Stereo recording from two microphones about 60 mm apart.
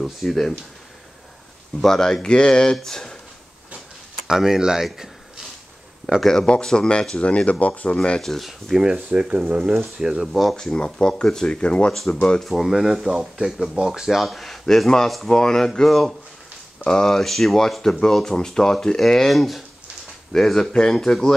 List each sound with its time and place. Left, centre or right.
0.0 s speech: centre
1.8 s speech: centre
4.3 s speech: centre
6.2 s speech: centre
8.2 s speech: centre
8.9 s speech: centre
10.3 s speech: centre
11.9 s speech: centre
12.4 s speech: centre